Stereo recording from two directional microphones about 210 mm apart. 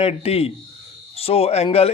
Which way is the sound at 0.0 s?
30° left (ahead or behind).